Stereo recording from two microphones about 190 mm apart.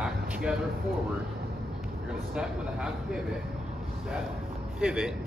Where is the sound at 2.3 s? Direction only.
5° right (ahead or behind).